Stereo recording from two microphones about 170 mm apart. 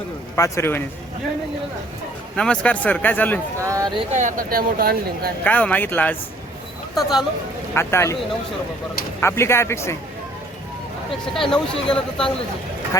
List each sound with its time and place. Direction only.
0.3 s speech: 20° left (ahead or behind)
2.3 s speech: 5° left (ahead or behind)
3.6 s speech: 20° right (ahead or behind)
4.1 s speech: 45° right (ahead or behind); by 5.3 s 60° right (ahead or behind)
5.4 s speech: 10° left (ahead or behind)
6.9 s speech: centre (ahead or behind)
7.7 s speech: 15° left (ahead or behind)
9.2 s speech: 15° left (ahead or behind)
11.3 s speech: 5° left (ahead or behind)